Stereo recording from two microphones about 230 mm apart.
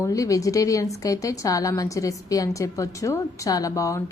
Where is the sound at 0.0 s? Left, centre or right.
Centre.